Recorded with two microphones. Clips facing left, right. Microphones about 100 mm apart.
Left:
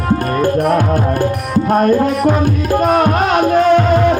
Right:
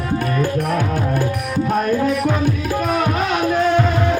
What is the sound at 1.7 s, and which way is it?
Music, 50° left (ahead or behind).